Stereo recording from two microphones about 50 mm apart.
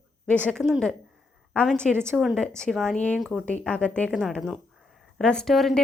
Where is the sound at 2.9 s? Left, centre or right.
Left.